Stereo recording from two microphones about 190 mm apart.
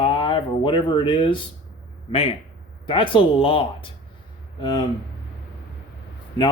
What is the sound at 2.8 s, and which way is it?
Speech, 25° left (ahead or behind).